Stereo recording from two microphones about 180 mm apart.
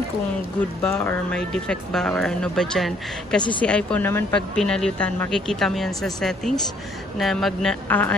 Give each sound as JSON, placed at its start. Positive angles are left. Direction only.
{"t": 0.8, "sound": "speech", "side_deg": 5}